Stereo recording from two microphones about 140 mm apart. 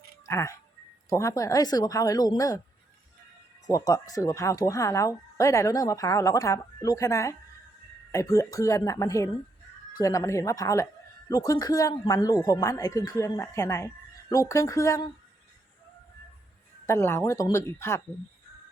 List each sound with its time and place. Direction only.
0.3 s speech: 20° left (ahead or behind)
3.7 s speech: 25° left (ahead or behind)
16.8 s speech: 20° left (ahead or behind)